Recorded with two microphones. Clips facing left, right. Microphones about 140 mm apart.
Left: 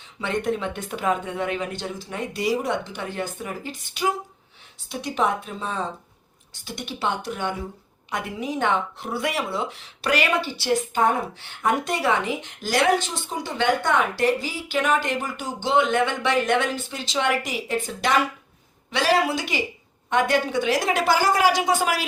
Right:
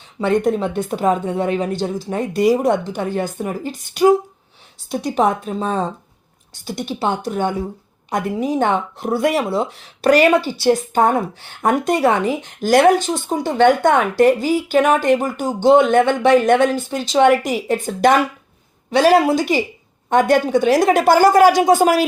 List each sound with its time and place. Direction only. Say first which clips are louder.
0.2 s a woman's voice: right 8 dB; 45° right (ahead or behind)